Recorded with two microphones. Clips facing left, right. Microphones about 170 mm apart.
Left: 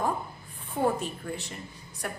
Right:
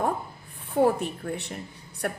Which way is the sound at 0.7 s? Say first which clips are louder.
Right 5 dB; 65° right (ahead or behind).